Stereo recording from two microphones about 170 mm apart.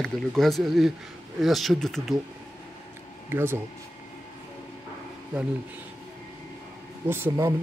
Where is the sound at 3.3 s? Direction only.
15° right (ahead or behind).